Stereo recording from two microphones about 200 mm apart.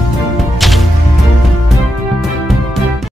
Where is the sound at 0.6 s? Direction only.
Centre (ahead or behind).